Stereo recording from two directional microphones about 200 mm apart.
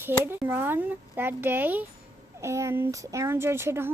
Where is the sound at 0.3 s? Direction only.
10° right (ahead or behind).